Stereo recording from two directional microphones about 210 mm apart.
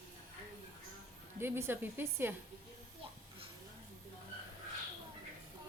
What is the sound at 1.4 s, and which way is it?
Speech, 10° right (ahead or behind).